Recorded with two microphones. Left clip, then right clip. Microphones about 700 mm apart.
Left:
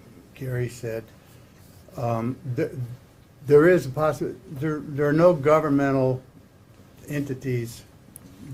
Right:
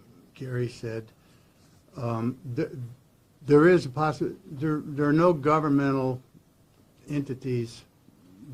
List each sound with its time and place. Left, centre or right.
0.3 s speech: right